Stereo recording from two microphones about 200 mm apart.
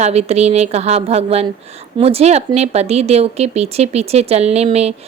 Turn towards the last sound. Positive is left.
turn(degrees=-30)  # may be behind; listen again after turning